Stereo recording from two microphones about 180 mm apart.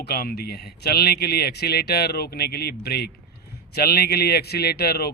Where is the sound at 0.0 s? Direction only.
60° left (ahead or behind).